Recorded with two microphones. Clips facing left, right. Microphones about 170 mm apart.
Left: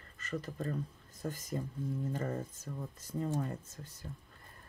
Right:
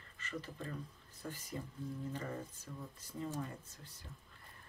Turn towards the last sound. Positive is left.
turn(degrees=45)  # may be behind; listen again after turning